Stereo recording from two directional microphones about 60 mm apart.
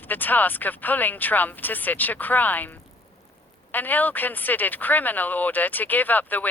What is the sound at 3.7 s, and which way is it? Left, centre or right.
Speech, left.